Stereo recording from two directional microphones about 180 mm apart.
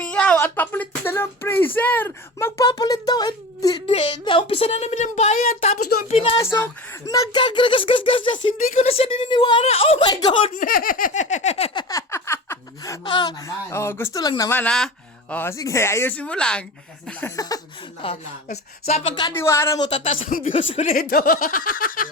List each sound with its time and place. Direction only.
0.0 s speech: 5° left (ahead or behind); by 6.4 s 30° left (ahead or behind)
6.4 s a sound: 15° left (ahead or behind)
8.5 s speech: 45° left (ahead or behind); by 10.5 s 25° left (ahead or behind)
10.5 s a sound: 50° left (ahead or behind); by 14.6 s 20° left (ahead or behind)
14.6 s speech: 5° left (ahead or behind); by 17.6 s 20° left (ahead or behind)
18.0 s speech: 30° left (ahead or behind)
19.3 s speech: 15° left (ahead or behind)
19.9 s speech: 30° left (ahead or behind)
20.9 s speech: 55° left (ahead or behind)